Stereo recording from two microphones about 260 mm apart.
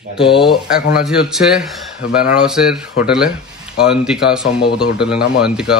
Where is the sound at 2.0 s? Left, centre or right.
Left.